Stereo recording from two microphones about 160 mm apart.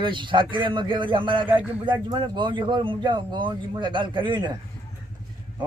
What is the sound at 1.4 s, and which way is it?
Speech, 10° right (ahead or behind).